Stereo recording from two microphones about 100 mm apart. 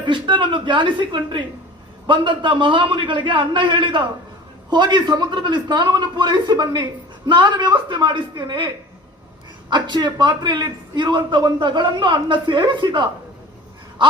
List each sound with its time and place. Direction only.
0.0 s a man's voice: 55° right (ahead or behind)